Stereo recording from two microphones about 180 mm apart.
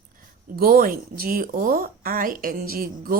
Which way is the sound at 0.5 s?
55° right (ahead or behind).